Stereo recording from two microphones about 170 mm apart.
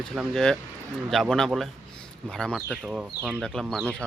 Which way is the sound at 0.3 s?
Centre (ahead or behind).